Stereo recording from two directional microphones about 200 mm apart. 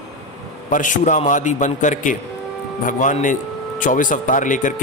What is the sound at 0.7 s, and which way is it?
Speech, 40° left (ahead or behind).